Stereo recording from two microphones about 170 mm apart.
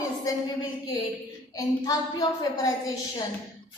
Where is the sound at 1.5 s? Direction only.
20° left (ahead or behind).